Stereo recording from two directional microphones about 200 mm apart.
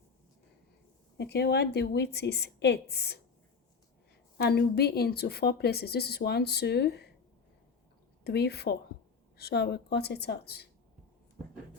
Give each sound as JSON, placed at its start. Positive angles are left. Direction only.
{"t": 1.2, "sound": "a woman's voice", "side_deg": 55}
{"t": 4.4, "sound": "speech", "side_deg": 55}
{"t": 8.2, "sound": "a woman's voice", "side_deg": 55}